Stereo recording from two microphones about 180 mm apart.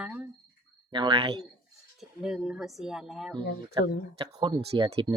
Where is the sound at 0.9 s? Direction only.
25° right (ahead or behind).